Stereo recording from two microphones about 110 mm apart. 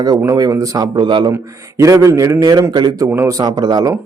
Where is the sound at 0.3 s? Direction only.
35° right (ahead or behind).